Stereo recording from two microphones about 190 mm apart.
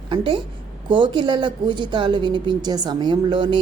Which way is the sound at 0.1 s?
25° right (ahead or behind).